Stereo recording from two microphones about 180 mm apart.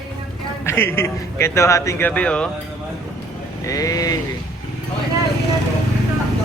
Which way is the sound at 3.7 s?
20° left (ahead or behind).